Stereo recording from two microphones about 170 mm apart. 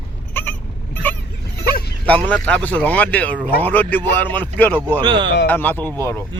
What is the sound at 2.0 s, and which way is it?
Speech, 10° left (ahead or behind).